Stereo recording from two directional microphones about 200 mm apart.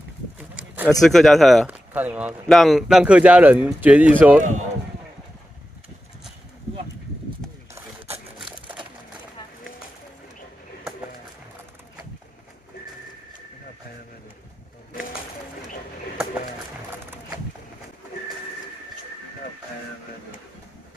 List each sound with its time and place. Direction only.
0.4 s speech: 5° right (ahead or behind)
4.4 s speech: 35° right (ahead or behind)
8.1 s a sound: 25° right (ahead or behind)